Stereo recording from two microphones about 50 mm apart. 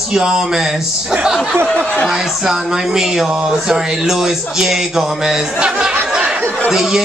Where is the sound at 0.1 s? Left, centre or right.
Centre.